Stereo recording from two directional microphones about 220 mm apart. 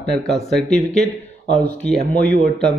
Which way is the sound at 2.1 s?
5° left (ahead or behind).